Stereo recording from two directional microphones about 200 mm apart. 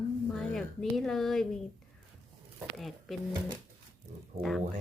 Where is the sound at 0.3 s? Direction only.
Centre (ahead or behind).